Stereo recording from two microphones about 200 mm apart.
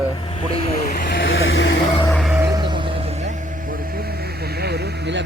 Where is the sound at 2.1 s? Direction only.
Centre (ahead or behind).